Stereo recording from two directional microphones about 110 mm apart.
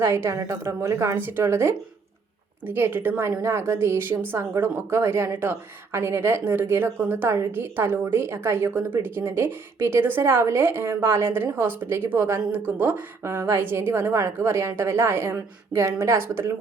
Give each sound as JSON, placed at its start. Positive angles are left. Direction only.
{"t": 0.0, "sound": "a woman's voice", "side_deg": -25}